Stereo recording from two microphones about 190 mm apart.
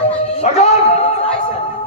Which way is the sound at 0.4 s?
35° left (ahead or behind).